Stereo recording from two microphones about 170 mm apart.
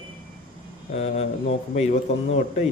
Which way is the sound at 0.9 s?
40° left (ahead or behind).